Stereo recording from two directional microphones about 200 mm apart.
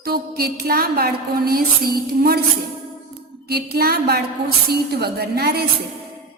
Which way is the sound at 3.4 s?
50° right (ahead or behind).